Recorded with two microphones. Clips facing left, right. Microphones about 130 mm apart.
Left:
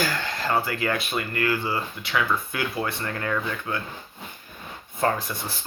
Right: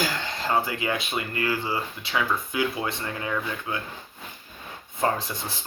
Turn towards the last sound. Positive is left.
turn(degrees=-20)  # may be behind; listen again after turning